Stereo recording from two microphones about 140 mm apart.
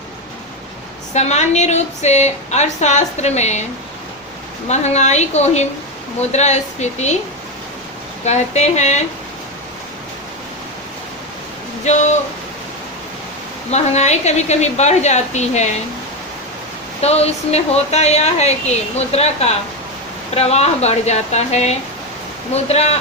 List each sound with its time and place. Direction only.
1.1 s a woman's voice: 55° left (ahead or behind)
4.7 s a woman's voice: 55° left (ahead or behind)
8.2 s a woman's voice: 55° left (ahead or behind)
11.9 s a woman's voice: 60° left (ahead or behind)
13.7 s a woman's voice: 55° left (ahead or behind)
17.0 s a woman's voice: 50° left (ahead or behind)